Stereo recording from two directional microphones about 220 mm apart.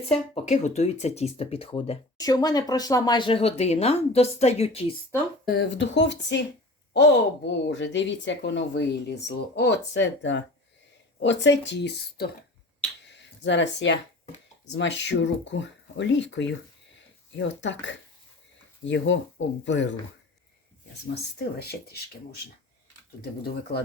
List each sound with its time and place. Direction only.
0.1 s speech: 30° left (ahead or behind)
5.5 s speech: 55° left (ahead or behind)
13.1 s a sound: 55° left (ahead or behind)
14.7 s speech: 55° left (ahead or behind)